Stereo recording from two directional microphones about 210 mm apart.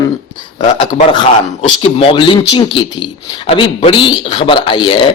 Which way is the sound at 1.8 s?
25° left (ahead or behind).